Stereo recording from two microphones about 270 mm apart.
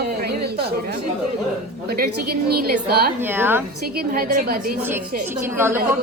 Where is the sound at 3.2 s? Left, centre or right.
Centre.